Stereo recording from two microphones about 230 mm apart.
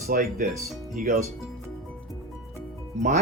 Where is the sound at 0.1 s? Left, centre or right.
Right.